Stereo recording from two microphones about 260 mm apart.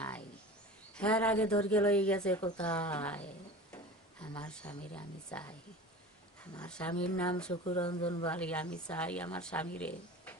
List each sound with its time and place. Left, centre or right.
0.9 s speech: centre
6.6 s speech: centre
7.6 s speech: left
8.3 s speech: centre